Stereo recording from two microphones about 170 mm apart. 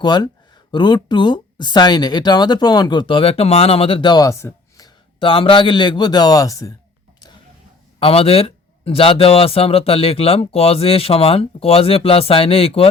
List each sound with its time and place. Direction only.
0.0 s speech: 25° left (ahead or behind)
5.2 s speech: 30° left (ahead or behind)
7.9 s speech: 35° left (ahead or behind)